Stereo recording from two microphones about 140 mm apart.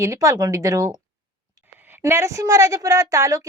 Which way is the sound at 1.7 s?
15° right (ahead or behind).